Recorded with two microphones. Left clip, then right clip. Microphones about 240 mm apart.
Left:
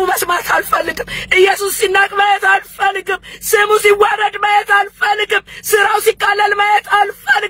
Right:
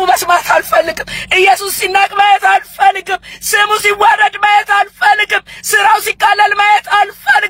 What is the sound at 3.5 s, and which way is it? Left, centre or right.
Speech, right.